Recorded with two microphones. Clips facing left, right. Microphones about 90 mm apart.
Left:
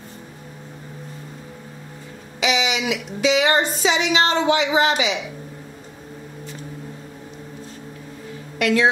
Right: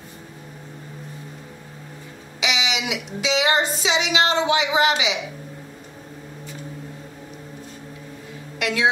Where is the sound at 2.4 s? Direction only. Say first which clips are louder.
Left 4 dB; 45° left (ahead or behind).